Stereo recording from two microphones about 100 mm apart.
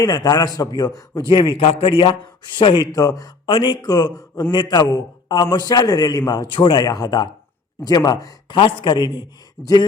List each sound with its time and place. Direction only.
0.0 s a man's voice: 40° left (ahead or behind)
1.3 s a man's voice: 55° left (ahead or behind)
1.6 s speech: 70° left (ahead or behind); by 2.8 s 55° left (ahead or behind)
2.9 s a man's voice: 35° left (ahead or behind)
3.4 s a man's voice: 50° left (ahead or behind)
6.8 s a man's voice: 40° left (ahead or behind)
8.4 s a man's voice: 55° left (ahead or behind)